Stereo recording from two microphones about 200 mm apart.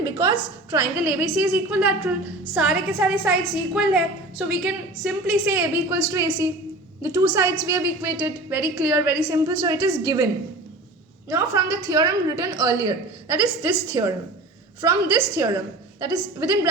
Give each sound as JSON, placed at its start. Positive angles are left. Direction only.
{"t": 0.0, "sound": "a woman's voice", "side_deg": -15}
{"t": 11.3, "sound": "a woman's voice", "side_deg": -15}